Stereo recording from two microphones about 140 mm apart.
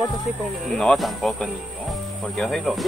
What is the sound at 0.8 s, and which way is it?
Speech, 5° left (ahead or behind).